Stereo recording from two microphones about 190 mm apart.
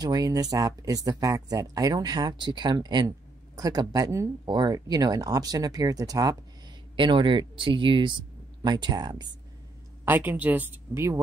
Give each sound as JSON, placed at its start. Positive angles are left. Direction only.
{"t": 0.0, "sound": "speech", "side_deg": -20}
{"t": 10.0, "sound": "speech", "side_deg": -10}